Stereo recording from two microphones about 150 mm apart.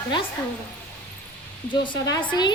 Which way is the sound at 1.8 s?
30° left (ahead or behind).